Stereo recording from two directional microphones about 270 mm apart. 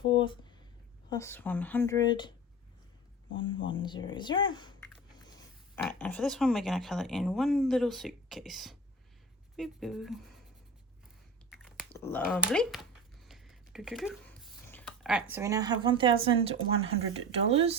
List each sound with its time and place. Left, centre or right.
0.0 s a sound: centre
1.1 s speech: centre
3.3 s speech: centre
5.7 s speech: centre
11.5 s chewing: centre
11.9 s speech: centre; by 17.7 s right